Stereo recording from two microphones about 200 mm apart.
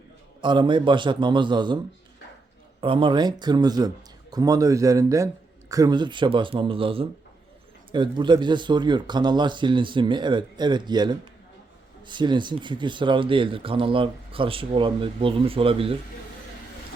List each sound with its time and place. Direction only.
0.4 s speech: 25° right (ahead or behind)
2.8 s speech: 25° right (ahead or behind)